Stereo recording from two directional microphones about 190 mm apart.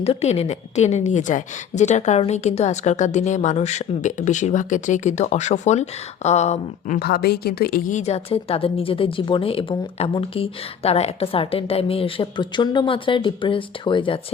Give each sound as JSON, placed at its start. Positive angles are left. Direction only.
{"t": 0.0, "sound": "a woman's voice", "side_deg": 35}
{"t": 7.0, "sound": "a woman's voice", "side_deg": 55}